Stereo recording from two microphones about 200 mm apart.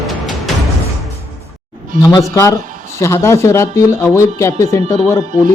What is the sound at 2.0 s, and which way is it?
Speech, 20° left (ahead or behind).